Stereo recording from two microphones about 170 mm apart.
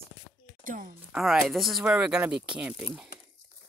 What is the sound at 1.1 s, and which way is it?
Speech, centre (ahead or behind).